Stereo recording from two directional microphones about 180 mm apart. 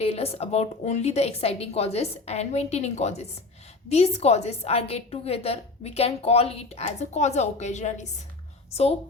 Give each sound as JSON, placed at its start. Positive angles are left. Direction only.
{"t": 0.0, "sound": "a woman's voice", "side_deg": 35}